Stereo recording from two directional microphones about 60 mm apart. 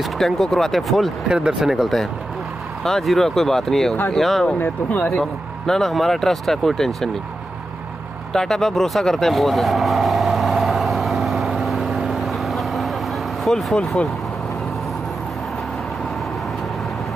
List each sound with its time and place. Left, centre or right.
0.2 s speech: centre
1.3 s speech: centre
2.8 s speech: centre
4.6 s speech: left
5.7 s speech: centre
8.3 s vehicle: centre
13.4 s speech: centre